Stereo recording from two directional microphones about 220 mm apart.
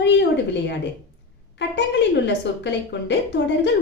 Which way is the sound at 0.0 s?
50° left (ahead or behind).